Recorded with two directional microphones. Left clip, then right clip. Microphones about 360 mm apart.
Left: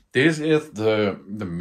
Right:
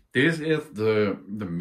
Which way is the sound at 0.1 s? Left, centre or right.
Centre.